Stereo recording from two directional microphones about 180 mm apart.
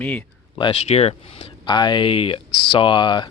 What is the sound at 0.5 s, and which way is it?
Speech, 30° left (ahead or behind).